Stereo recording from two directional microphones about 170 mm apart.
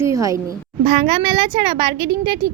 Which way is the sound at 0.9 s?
35° right (ahead or behind).